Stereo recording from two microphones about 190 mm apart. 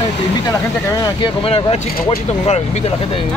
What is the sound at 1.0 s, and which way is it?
Speech, 25° left (ahead or behind).